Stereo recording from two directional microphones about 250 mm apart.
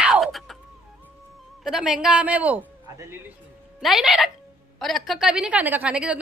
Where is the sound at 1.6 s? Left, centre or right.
Centre.